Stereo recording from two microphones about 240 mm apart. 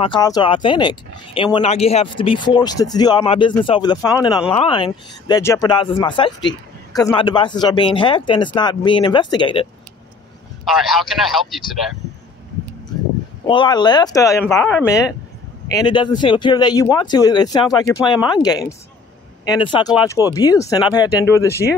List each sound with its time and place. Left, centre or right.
0.0 s speech: centre
10.6 s a man's voice: centre
13.5 s speech: centre